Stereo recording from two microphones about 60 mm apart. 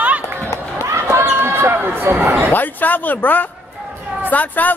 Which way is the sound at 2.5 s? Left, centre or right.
Left.